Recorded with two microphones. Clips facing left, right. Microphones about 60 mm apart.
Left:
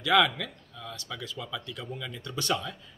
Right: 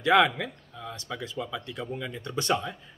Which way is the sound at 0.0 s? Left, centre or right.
Right.